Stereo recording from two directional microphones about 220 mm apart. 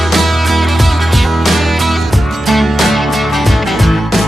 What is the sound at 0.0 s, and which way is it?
Music, centre (ahead or behind).